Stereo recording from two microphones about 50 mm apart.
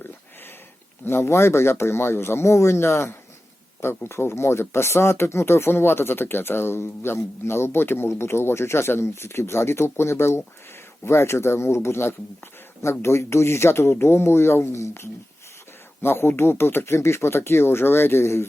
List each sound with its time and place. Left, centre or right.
1.0 s speech: left
14.8 s speech: left
16.0 s speech: left